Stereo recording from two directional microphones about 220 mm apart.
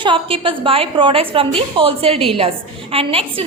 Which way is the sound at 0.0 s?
25° right (ahead or behind).